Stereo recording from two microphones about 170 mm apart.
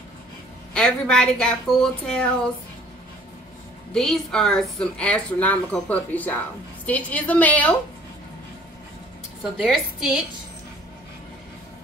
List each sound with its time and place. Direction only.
0.7 s speech: 5° left (ahead or behind)
3.9 s a woman's voice: 5° left (ahead or behind)
9.4 s speech: 5° right (ahead or behind)